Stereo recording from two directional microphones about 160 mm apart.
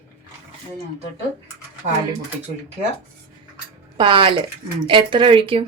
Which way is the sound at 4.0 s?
30° right (ahead or behind).